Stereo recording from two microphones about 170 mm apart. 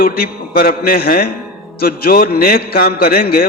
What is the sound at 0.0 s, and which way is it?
A man's voice, 60° left (ahead or behind).